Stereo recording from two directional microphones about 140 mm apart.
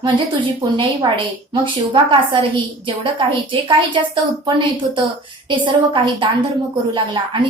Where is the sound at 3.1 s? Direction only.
35° right (ahead or behind).